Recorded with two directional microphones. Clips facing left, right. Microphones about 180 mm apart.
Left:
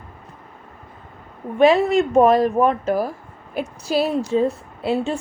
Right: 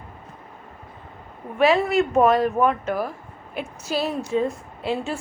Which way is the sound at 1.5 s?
35° left (ahead or behind).